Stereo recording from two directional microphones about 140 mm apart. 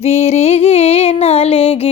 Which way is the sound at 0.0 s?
50° left (ahead or behind).